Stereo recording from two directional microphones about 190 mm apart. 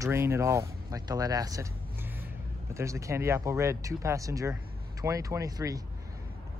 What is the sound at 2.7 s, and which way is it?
Speech, 15° right (ahead or behind).